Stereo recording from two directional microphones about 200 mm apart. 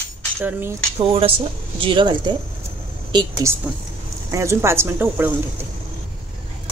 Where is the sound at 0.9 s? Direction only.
25° right (ahead or behind); by 5.3 s 10° right (ahead or behind).